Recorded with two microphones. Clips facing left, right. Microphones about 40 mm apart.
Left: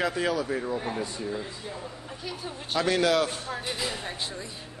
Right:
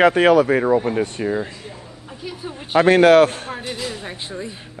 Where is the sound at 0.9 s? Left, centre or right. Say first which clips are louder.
Right 10 dB; right.